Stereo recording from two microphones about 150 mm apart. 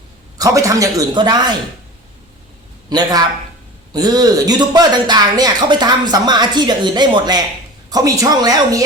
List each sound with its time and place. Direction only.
0.3 s a man's voice: 20° right (ahead or behind)
2.9 s a man's voice: 25° right (ahead or behind)